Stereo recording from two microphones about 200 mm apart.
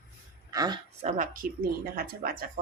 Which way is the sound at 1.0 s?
40° right (ahead or behind).